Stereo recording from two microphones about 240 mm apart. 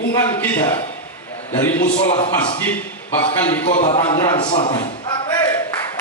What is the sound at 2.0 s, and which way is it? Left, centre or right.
Speech, left.